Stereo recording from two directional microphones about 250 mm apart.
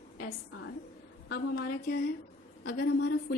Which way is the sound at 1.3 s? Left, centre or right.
Left.